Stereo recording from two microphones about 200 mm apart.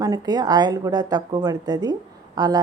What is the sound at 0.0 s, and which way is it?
Speech, 20° right (ahead or behind).